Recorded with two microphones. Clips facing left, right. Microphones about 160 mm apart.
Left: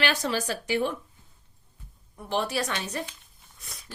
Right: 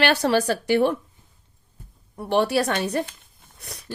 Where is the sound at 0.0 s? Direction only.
65° right (ahead or behind).